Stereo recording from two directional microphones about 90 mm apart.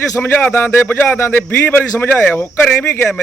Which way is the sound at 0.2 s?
20° left (ahead or behind).